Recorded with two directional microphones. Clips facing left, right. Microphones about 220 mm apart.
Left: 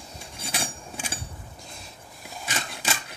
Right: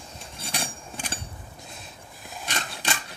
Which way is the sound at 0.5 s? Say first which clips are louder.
Even; 10° left (ahead or behind).